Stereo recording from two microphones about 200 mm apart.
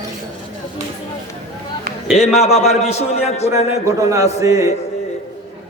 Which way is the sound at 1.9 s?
45° right (ahead or behind).